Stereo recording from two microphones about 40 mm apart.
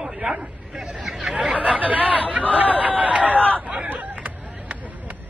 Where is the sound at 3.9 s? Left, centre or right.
Right.